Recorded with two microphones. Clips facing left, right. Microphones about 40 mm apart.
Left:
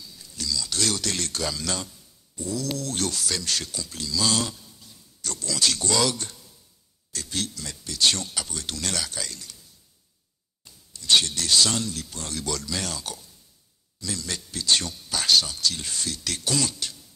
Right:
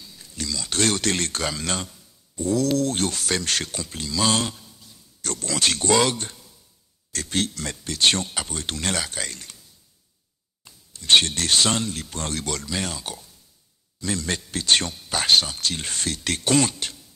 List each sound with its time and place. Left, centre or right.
0.0 s speech: right
2.3 s a sound: right
2.8 s speech: right
7.1 s speech: right
10.6 s speech: right
12.6 s speech: right
13.9 s speech: right